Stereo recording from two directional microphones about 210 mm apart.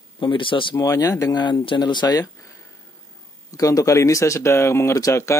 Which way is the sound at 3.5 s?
15° left (ahead or behind).